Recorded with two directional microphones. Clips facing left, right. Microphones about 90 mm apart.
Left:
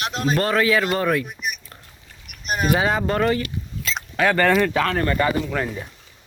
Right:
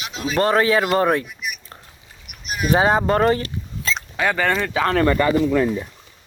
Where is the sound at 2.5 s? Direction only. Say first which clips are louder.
Left 2 dB; 40° left (ahead or behind).